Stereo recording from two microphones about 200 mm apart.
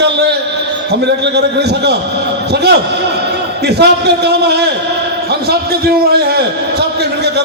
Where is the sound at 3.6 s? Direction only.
55° right (ahead or behind).